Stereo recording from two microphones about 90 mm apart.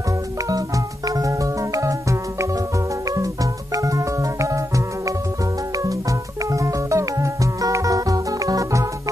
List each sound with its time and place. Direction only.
0.5 s music: 40° right (ahead or behind)
3.7 s music: 35° right (ahead or behind)